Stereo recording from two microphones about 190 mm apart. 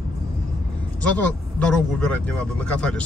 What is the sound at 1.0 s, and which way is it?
Speech, 5° left (ahead or behind).